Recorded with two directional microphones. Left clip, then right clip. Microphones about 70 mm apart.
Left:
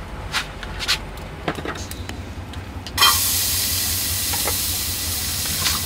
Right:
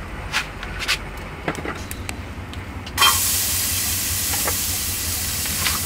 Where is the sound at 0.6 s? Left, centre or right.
Left.